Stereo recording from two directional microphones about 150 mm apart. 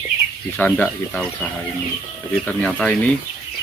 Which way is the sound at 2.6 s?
5° left (ahead or behind).